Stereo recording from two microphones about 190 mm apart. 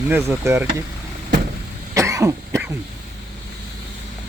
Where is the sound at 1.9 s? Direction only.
15° right (ahead or behind).